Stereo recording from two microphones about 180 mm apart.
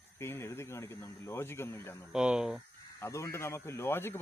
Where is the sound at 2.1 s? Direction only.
5° right (ahead or behind).